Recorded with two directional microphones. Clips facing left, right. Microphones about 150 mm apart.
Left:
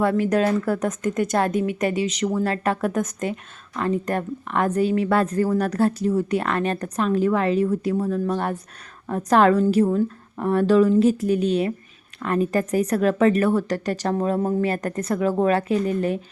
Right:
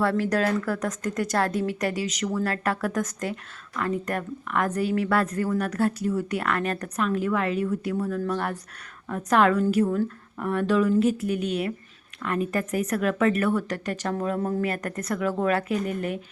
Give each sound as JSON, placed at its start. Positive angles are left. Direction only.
{"t": 0.0, "sound": "a woman's voice", "side_deg": 20}